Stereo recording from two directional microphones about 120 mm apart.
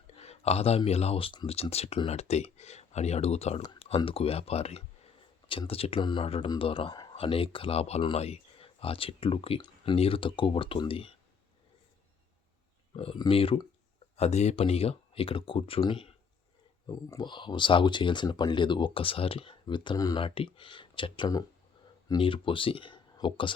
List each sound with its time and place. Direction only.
0.2 s a sound: 60° left (ahead or behind)
0.9 s speech: 60° left (ahead or behind)
13.1 s speech: 45° left (ahead or behind)
14.2 s speech: 65° left (ahead or behind)
14.5 s speech: 55° left (ahead or behind)
16.9 s speech: 30° left (ahead or behind)
20.2 s speech: 45° left (ahead or behind)